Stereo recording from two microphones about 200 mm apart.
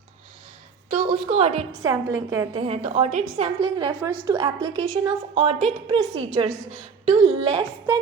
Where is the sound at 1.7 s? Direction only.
15° right (ahead or behind).